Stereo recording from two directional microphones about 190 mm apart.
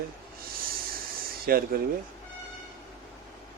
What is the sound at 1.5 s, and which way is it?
Speech, 50° right (ahead or behind).